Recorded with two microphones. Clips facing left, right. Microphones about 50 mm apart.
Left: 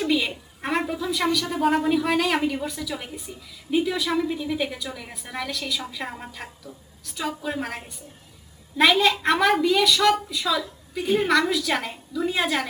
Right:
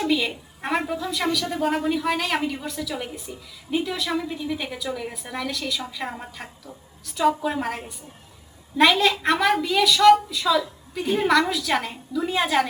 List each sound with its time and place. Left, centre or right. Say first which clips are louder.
0.0 s a woman's voice: even; centre